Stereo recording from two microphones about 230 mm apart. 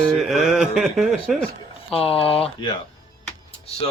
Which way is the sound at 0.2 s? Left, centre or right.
Centre.